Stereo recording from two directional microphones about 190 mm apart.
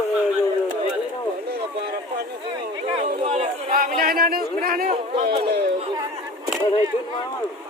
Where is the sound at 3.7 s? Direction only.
50° right (ahead or behind).